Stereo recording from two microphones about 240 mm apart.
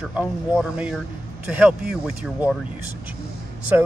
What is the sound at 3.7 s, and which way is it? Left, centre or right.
Speech, centre.